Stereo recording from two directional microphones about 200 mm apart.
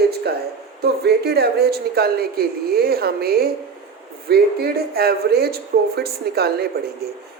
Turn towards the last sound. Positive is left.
turn(degrees=-50)  # may be behind; listen again after turning